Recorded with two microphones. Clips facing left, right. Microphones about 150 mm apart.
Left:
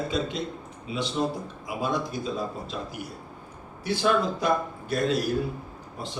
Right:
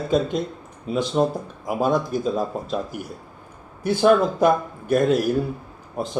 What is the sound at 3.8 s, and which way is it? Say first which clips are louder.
Speech: right 7 dB; 50° right (ahead or behind).